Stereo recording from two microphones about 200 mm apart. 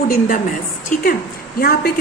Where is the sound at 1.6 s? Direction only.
50° left (ahead or behind).